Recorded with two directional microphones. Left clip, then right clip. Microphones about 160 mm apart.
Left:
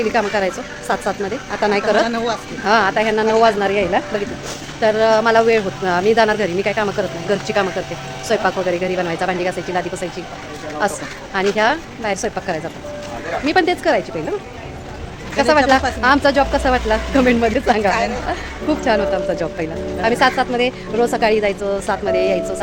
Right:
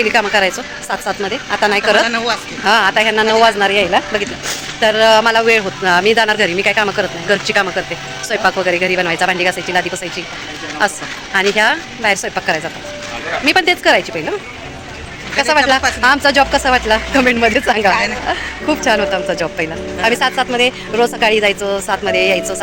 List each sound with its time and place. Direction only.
0.0 s speech: centre (ahead or behind)
2.0 s speech: 25° left (ahead or behind)
2.6 s speech: 5° right (ahead or behind)
8.3 s a woman's voice: 10° right (ahead or behind)
10.8 s a woman's voice: 5° right (ahead or behind)
15.4 s a woman's voice: centre (ahead or behind)